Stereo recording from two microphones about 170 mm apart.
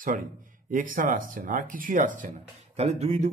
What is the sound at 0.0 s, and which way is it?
Speech, 50° right (ahead or behind).